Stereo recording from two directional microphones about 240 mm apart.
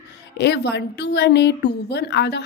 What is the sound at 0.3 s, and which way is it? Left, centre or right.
A woman's voice, left.